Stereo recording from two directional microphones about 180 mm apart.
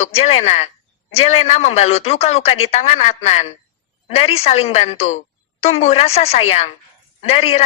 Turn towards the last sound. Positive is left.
turn(degrees=35)  # may be behind; listen again after turning